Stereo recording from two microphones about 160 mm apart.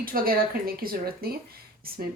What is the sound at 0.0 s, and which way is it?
Speech, 65° right (ahead or behind).